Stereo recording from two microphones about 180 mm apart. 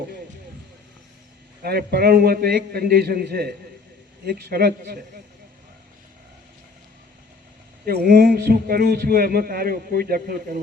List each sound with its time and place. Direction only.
1.6 s speech: 60° right (ahead or behind)
7.9 s speech: 55° right (ahead or behind)